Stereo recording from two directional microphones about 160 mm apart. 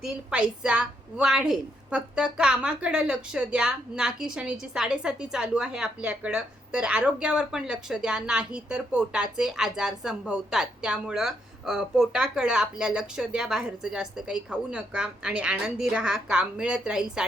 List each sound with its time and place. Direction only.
0.0 s a woman's voice: 5° right (ahead or behind)